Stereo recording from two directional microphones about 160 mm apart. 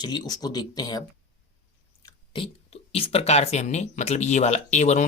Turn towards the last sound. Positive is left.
turn(degrees=45)  # may be behind; listen again after turning